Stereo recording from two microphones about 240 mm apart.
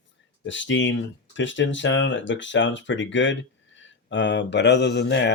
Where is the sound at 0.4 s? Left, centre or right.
Left.